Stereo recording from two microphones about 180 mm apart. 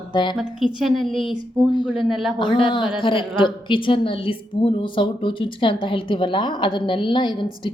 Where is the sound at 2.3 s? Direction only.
25° left (ahead or behind).